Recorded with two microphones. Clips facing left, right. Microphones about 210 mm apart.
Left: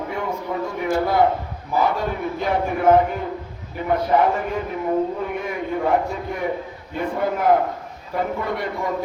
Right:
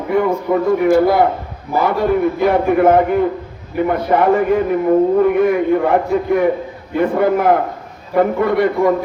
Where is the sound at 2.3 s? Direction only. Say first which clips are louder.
Right 9 dB; 65° right (ahead or behind).